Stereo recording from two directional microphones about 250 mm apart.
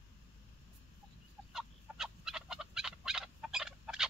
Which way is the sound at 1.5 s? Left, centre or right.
Centre.